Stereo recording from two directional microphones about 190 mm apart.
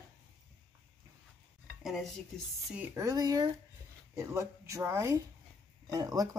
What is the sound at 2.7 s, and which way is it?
Speech, 10° right (ahead or behind).